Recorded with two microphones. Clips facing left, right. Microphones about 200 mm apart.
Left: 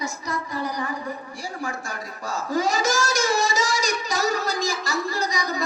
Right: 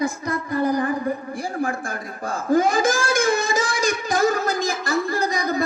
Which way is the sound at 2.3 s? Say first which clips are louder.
Right 5 dB; 55° right (ahead or behind).